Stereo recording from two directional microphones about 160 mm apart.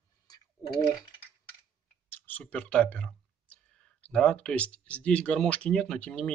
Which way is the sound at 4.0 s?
5° left (ahead or behind).